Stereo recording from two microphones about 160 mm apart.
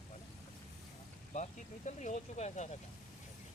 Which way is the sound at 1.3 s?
45° left (ahead or behind).